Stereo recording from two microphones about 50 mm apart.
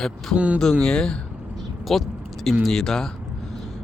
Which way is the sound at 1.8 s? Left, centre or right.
Centre.